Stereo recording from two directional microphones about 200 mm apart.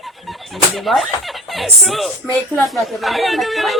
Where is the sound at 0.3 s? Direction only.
Centre (ahead or behind).